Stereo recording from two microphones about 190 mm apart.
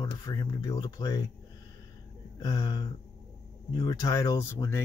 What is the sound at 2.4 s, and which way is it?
Speech, 20° left (ahead or behind).